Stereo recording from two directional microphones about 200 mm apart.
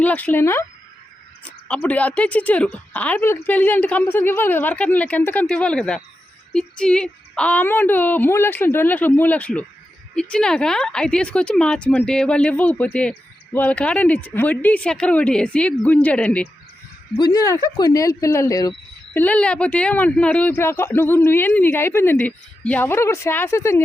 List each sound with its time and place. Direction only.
0.0 s speech: 10° left (ahead or behind)
17.2 s speech: 20° left (ahead or behind)